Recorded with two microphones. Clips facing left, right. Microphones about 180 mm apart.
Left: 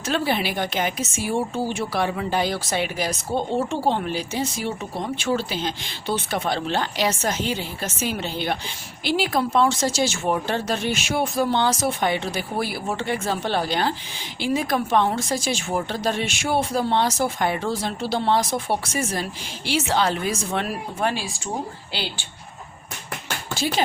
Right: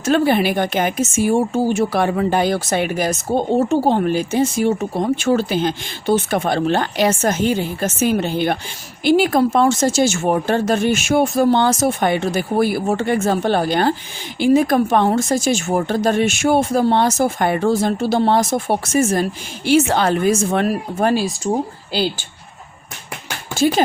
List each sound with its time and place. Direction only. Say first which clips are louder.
0.0 s a woman's voice: right 8 dB; 50° right (ahead or behind)